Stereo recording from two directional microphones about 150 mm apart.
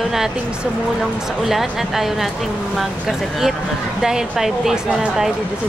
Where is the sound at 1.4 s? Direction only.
Centre (ahead or behind).